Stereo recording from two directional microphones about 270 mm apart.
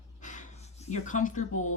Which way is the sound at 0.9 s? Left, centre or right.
Left.